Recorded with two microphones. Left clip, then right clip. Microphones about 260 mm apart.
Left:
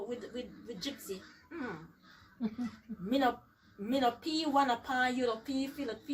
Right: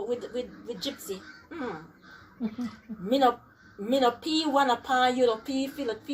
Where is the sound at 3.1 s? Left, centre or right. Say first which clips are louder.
Right 8 dB; centre.